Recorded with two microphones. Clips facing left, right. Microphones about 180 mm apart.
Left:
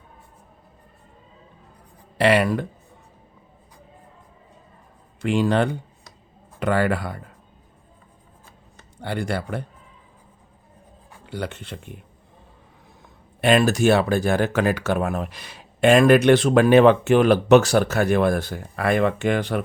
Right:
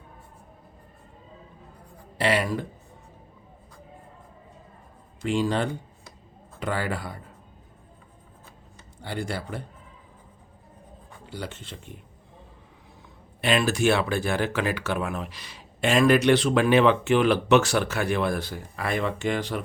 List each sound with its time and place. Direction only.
2.1 s speech: 65° left (ahead or behind)
5.2 s speech: 65° left (ahead or behind)
9.0 s speech: 60° left (ahead or behind)
11.3 s speech: 60° left (ahead or behind)
13.4 s speech: 45° left (ahead or behind)